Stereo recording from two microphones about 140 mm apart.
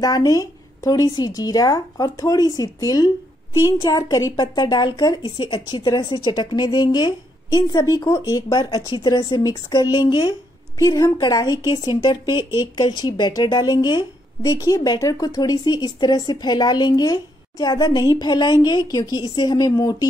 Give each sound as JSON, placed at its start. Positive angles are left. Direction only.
{"t": 0.0, "sound": "a woman's voice", "side_deg": 25}